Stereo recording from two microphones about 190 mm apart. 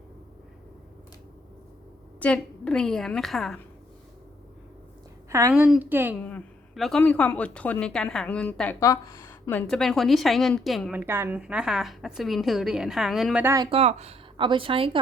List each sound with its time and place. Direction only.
2.2 s a woman's voice: 5° left (ahead or behind)
5.3 s a woman's voice: 15° right (ahead or behind)
6.2 s a woman's voice: 5° left (ahead or behind)
11.0 s a woman's voice: 10° right (ahead or behind)
13.7 s speech: 35° right (ahead or behind)